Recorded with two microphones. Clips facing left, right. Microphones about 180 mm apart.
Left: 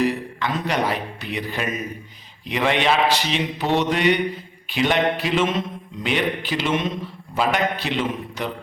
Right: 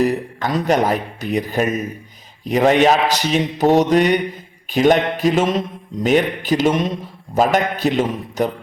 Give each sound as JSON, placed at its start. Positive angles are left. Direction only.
{"t": 0.0, "sound": "speech", "side_deg": -40}